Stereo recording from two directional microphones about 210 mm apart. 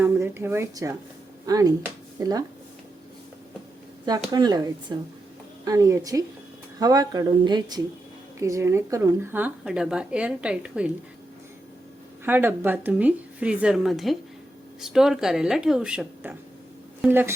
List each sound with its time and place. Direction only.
0.0 s a woman's voice: 10° right (ahead or behind)
4.3 s a woman's voice: 20° right (ahead or behind)
12.2 s a woman's voice: 10° right (ahead or behind)